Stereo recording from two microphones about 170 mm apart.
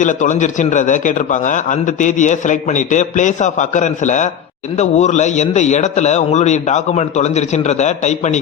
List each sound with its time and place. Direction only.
0.0 s a man's voice: 45° left (ahead or behind)